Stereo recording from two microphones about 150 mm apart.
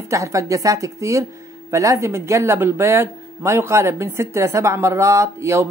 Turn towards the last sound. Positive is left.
turn(degrees=-20)  # may be behind; listen again after turning